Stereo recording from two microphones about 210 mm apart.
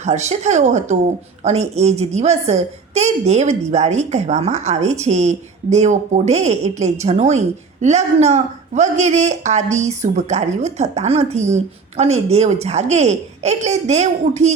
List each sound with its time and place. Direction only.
0.0 s a woman's voice: 35° right (ahead or behind)